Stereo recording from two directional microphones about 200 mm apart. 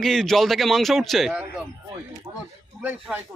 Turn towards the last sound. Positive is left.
turn(degrees=-10)  # may be behind; listen again after turning